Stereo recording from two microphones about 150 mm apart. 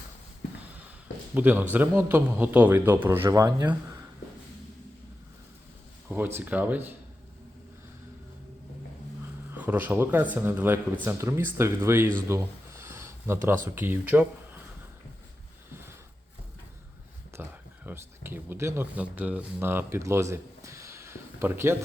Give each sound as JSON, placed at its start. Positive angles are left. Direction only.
{"t": 1.3, "sound": "speech", "side_deg": -10}
{"t": 6.1, "sound": "speech", "side_deg": -15}
{"t": 9.5, "sound": "speech", "side_deg": -10}
{"t": 12.3, "sound": "a sound", "side_deg": -15}
{"t": 13.7, "sound": "speech", "side_deg": -15}
{"t": 15.7, "sound": "a sound", "side_deg": -15}
{"t": 17.3, "sound": "speech", "side_deg": -15}